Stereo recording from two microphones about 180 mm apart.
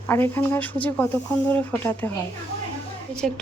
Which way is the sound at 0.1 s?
10° left (ahead or behind).